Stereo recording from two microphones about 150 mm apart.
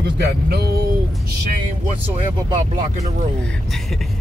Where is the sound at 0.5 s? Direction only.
90° right.